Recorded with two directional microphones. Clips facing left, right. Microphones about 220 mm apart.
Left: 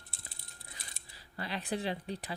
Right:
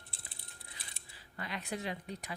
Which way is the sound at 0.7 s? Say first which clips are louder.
Left 1 dB; 35° left (ahead or behind).